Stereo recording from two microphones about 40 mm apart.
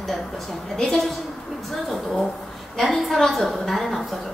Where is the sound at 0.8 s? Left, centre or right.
Centre.